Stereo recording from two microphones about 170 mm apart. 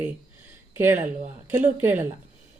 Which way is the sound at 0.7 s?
15° right (ahead or behind).